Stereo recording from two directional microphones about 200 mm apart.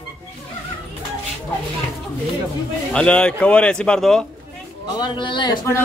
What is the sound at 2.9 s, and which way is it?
A man's voice, 5° left (ahead or behind).